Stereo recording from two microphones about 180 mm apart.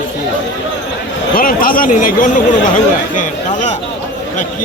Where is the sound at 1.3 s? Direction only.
50° left (ahead or behind).